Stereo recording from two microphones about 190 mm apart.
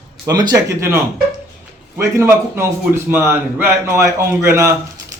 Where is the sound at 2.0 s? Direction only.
15° right (ahead or behind).